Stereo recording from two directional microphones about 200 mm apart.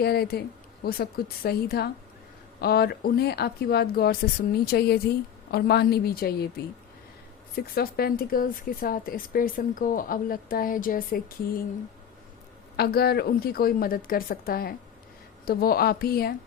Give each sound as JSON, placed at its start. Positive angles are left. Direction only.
{"t": 0.0, "sound": "speech", "side_deg": 50}
{"t": 7.5, "sound": "speech", "side_deg": 50}
{"t": 12.7, "sound": "speech", "side_deg": 50}